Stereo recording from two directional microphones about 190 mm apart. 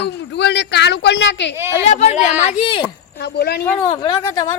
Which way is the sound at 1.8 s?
35° left (ahead or behind).